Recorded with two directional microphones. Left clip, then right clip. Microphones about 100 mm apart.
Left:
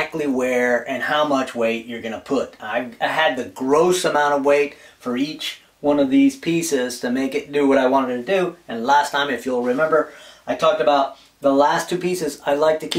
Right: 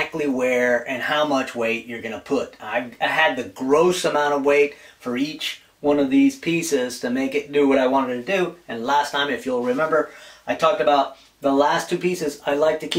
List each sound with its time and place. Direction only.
0.0 s speech: 15° left (ahead or behind)
1.0 s speech: 5° left (ahead or behind)
5.0 s speech: 5° left (ahead or behind)
8.3 s speech: 5° left (ahead or behind)
8.8 s speech: 20° left (ahead or behind)
11.4 s speech: 15° left (ahead or behind)